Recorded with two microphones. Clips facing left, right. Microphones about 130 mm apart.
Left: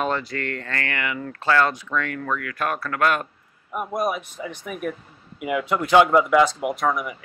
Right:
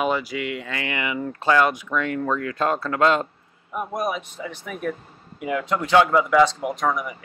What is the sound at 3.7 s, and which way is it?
Speech, 15° left (ahead or behind).